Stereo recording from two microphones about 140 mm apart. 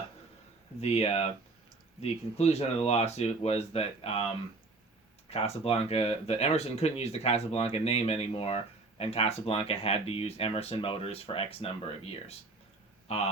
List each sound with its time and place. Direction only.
0.8 s speech: 50° left (ahead or behind)
5.3 s speech: 45° left (ahead or behind)